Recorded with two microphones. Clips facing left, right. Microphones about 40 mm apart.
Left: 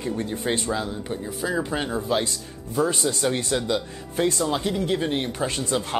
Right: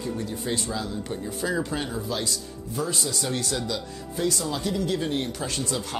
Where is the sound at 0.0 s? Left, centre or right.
Left.